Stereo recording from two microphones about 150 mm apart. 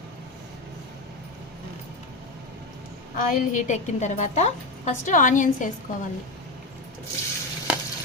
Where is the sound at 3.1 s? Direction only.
55° left (ahead or behind).